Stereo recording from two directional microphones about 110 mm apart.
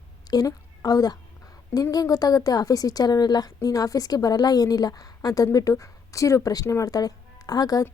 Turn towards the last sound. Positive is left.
turn(degrees=35)  # may be behind; listen again after turning